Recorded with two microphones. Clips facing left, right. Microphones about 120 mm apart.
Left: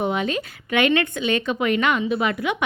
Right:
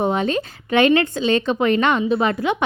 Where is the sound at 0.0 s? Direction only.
35° right (ahead or behind).